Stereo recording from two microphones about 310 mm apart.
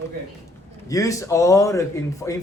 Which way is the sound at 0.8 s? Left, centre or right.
Centre.